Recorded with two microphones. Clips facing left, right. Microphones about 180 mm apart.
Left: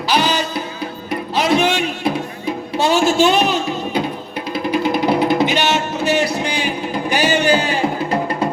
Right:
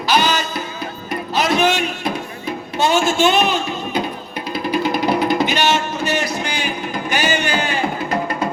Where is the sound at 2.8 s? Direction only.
35° left (ahead or behind).